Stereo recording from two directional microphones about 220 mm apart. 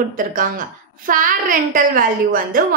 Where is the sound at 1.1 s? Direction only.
40° right (ahead or behind).